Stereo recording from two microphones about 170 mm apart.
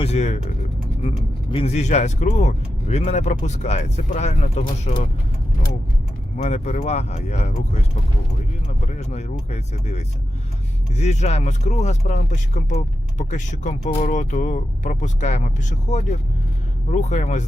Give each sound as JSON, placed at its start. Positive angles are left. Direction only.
{"t": 0.0, "sound": "speech", "side_deg": 40}
{"t": 6.3, "sound": "speech", "side_deg": 40}
{"t": 8.9, "sound": "speech", "side_deg": 40}